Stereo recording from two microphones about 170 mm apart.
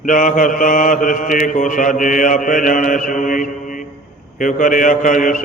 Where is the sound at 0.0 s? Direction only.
50° left (ahead or behind).